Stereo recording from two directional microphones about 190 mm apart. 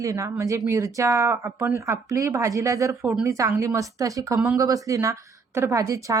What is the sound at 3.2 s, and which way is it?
Speech, 15° right (ahead or behind).